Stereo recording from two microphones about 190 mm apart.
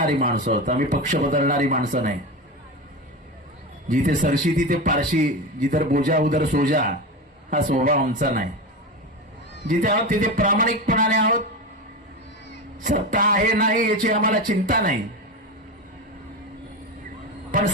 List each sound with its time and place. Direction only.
0.0 s a man's voice: 50° right (ahead or behind)
3.8 s a man's voice: 45° right (ahead or behind)
9.6 s a man's voice: 50° right (ahead or behind)
12.8 s a man's voice: 45° right (ahead or behind)